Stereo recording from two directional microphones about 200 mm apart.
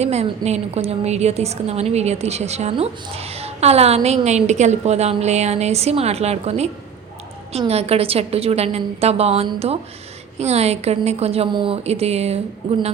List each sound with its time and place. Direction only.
0.0 s a woman's voice: 35° right (ahead or behind)